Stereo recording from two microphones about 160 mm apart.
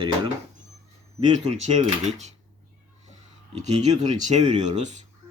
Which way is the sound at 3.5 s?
45° right (ahead or behind).